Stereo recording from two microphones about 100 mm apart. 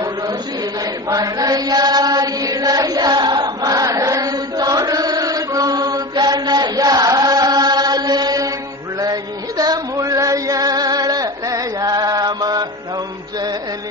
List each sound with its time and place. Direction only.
1.1 s chant: 40° right (ahead or behind)
9.0 s music: 40° right (ahead or behind)